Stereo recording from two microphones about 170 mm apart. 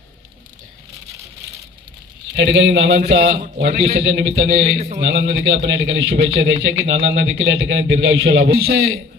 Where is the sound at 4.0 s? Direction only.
90° right.